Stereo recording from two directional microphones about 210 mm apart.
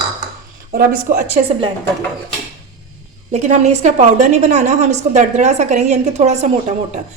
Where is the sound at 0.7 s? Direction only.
40° right (ahead or behind).